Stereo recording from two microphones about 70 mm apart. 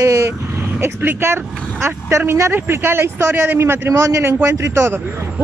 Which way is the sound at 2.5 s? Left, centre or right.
Right.